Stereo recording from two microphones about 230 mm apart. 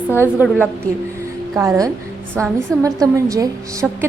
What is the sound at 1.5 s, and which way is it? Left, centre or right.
A woman's voice, centre.